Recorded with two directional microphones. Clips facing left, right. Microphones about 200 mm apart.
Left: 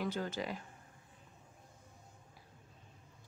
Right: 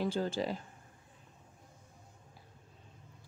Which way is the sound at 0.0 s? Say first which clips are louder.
Right 5 dB; 30° right (ahead or behind).